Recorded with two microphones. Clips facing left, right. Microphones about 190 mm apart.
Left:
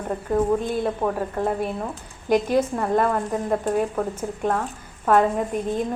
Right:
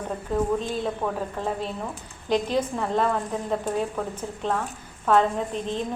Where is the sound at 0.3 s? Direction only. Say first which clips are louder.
Left 4 dB; 10° left (ahead or behind).